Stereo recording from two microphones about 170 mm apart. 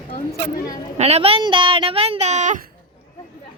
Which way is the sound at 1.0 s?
35° right (ahead or behind).